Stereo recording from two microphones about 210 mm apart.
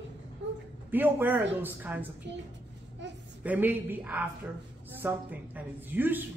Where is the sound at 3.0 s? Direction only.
60° right (ahead or behind).